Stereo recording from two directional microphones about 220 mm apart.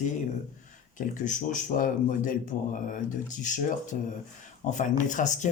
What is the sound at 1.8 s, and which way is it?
Speech, 35° left (ahead or behind).